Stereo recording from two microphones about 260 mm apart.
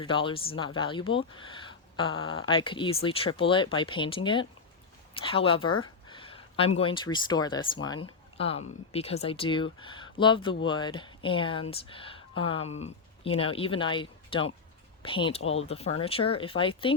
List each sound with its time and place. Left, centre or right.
0.0 s speech: centre